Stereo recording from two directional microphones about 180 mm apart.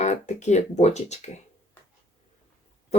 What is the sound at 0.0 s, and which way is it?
Speech, 40° left (ahead or behind).